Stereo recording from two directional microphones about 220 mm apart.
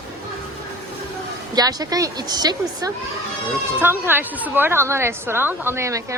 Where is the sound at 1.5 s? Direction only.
15° right (ahead or behind).